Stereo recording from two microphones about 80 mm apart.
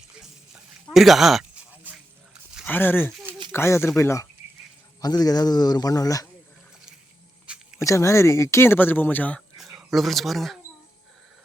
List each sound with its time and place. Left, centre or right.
0.9 s speech: centre
1.7 s a sound: right
2.6 s speech: left
4.9 s speech: left
7.8 s speech: left
9.6 s speech: centre